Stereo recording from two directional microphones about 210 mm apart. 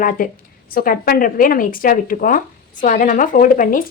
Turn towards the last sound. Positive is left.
turn(degrees=40)  # may be behind; listen again after turning